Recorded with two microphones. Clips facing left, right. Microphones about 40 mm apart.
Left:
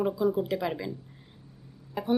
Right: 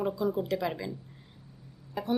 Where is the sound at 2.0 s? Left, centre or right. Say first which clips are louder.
Left 2 dB; centre.